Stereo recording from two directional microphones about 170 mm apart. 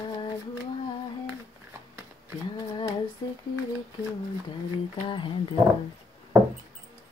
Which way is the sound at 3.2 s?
30° left (ahead or behind).